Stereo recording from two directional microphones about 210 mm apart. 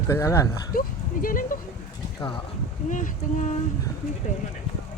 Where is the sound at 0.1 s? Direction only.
15° left (ahead or behind).